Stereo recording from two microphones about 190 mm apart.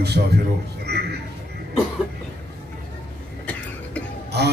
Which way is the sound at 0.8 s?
60° right (ahead or behind).